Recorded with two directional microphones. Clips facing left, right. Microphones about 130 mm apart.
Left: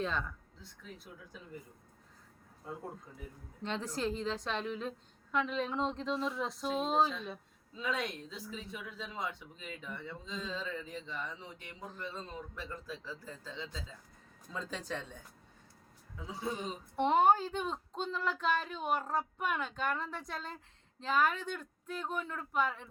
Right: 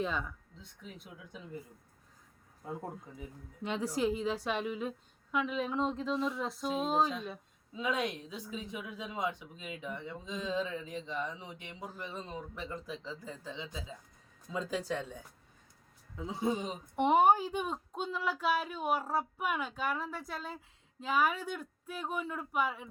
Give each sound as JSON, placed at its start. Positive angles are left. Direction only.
{"t": 0.0, "sound": "speech", "side_deg": -10}
{"t": 3.6, "sound": "speech", "side_deg": -10}
{"t": 7.7, "sound": "speech", "side_deg": -15}
{"t": 16.1, "sound": "speech", "side_deg": -25}